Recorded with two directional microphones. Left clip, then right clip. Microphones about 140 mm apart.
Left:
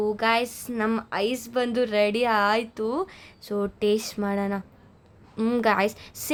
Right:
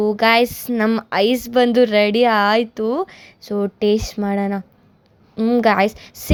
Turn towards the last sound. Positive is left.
turn(degrees=-35)  # may be behind; listen again after turning